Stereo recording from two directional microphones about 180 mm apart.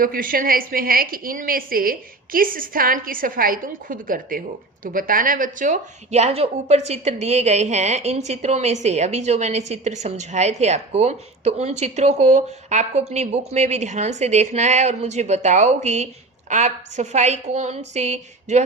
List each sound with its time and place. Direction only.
0.0 s a woman's voice: 50° right (ahead or behind)